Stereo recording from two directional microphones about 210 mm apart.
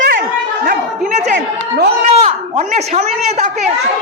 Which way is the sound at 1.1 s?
35° right (ahead or behind).